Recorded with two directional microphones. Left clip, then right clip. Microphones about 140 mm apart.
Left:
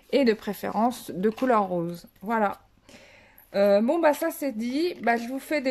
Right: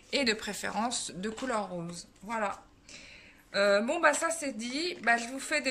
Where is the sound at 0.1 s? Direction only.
45° left (ahead or behind).